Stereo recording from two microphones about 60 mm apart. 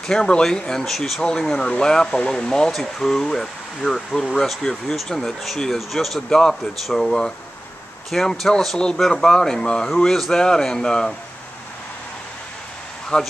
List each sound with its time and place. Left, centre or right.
0.0 s speech: centre
13.1 s speech: centre